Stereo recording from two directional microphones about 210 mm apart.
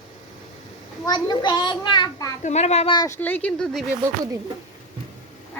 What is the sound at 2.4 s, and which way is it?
Speech, 30° left (ahead or behind).